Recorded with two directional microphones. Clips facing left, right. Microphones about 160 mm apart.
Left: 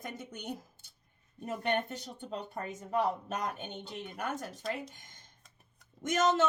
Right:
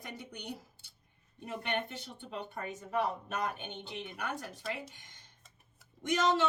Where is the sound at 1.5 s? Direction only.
40° left (ahead or behind).